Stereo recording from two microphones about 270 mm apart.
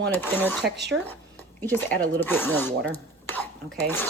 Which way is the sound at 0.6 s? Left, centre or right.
Right.